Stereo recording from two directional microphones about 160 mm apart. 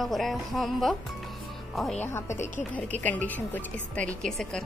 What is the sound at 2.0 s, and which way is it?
Speech, 15° left (ahead or behind).